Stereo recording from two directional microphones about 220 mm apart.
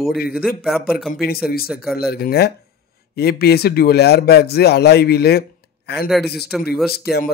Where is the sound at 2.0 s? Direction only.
45° left (ahead or behind).